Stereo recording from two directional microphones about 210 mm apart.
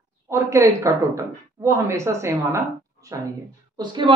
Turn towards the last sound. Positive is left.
turn(degrees=-25)  # may be behind; listen again after turning